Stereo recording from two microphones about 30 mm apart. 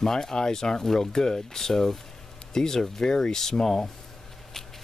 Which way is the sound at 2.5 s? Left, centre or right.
Centre.